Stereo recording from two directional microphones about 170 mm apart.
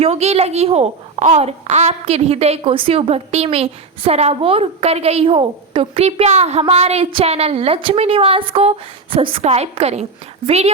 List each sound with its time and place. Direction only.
0.0 s a woman's voice: 40° right (ahead or behind)